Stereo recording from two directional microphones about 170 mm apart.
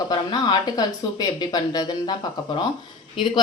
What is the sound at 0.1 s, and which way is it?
Speech, 25° left (ahead or behind).